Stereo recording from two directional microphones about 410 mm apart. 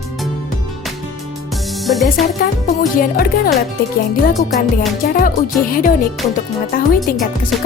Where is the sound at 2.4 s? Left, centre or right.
Left.